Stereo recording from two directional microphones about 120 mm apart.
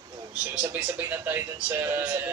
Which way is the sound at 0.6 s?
15° right (ahead or behind).